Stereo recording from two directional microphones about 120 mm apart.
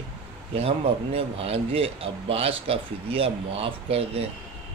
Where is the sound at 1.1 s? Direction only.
55° right (ahead or behind).